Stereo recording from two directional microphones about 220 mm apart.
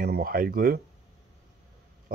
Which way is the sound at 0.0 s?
45° right (ahead or behind).